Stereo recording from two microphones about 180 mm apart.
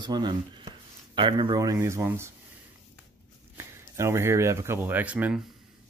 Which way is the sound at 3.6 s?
15° right (ahead or behind).